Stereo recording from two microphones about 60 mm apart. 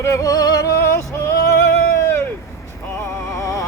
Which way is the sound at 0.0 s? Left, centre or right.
Left.